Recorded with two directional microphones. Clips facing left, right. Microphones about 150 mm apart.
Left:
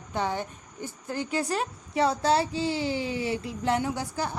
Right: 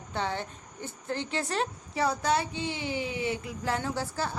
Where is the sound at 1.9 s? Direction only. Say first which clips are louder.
Left 4 dB; 25° left (ahead or behind).